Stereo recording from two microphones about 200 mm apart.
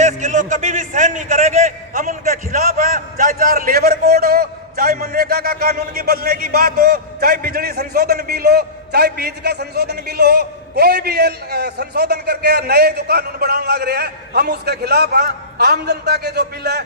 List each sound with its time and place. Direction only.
0.2 s a man's voice: 40° right (ahead or behind); by 16.8 s 55° right (ahead or behind)